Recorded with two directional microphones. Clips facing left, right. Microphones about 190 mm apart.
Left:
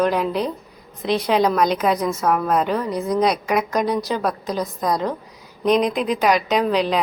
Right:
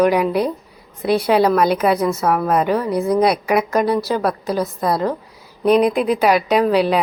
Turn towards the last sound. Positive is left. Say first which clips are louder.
# right 4 dB
turn(degrees=-10)  # may be behind; listen again after turning